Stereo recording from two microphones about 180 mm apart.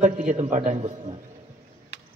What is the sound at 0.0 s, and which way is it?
A man's voice, 45° right (ahead or behind).